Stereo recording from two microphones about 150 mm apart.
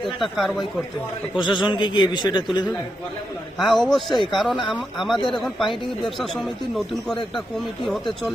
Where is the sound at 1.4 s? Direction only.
30° left (ahead or behind).